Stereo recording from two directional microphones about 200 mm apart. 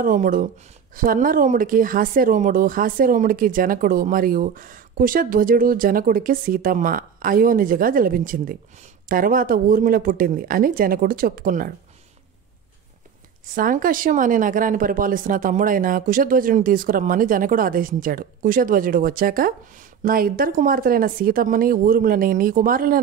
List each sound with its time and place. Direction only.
0.0 s a woman's voice: 45° right (ahead or behind)
13.6 s a woman's voice: 45° right (ahead or behind)